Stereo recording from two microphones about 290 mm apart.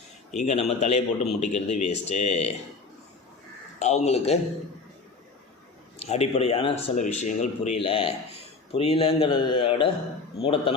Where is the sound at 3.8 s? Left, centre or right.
Left.